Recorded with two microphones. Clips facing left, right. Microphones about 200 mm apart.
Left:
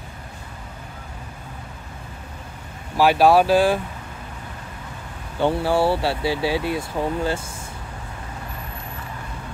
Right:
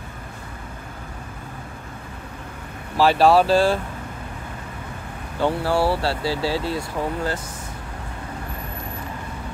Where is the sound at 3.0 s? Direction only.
10° left (ahead or behind).